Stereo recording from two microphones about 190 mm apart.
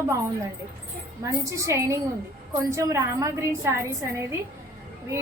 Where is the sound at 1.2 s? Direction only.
15° right (ahead or behind).